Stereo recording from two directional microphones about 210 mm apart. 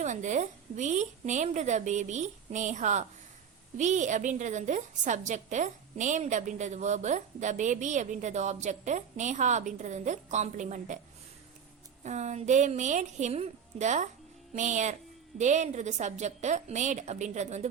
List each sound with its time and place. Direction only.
0.0 s a woman's voice: 35° right (ahead or behind)
12.0 s a woman's voice: 35° right (ahead or behind)